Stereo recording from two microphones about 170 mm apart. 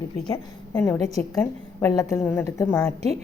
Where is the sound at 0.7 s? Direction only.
15° left (ahead or behind).